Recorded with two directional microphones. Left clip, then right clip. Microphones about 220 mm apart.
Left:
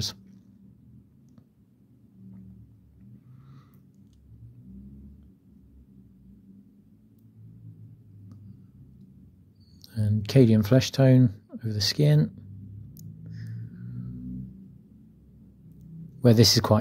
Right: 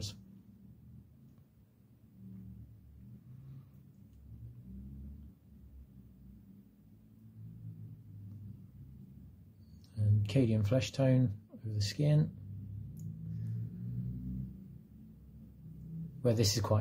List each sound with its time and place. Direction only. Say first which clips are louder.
9.8 s speech: left 9 dB; 30° left (ahead or behind)
16.2 s speech: left 12 dB; 35° left (ahead or behind)